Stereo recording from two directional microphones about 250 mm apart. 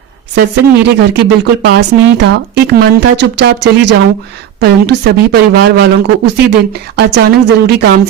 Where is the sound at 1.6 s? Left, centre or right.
Right.